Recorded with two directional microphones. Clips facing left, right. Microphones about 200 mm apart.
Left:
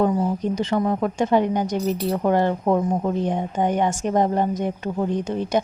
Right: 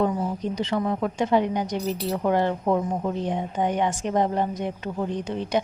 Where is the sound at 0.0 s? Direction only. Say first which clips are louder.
Left 4 dB; 45° left (ahead or behind).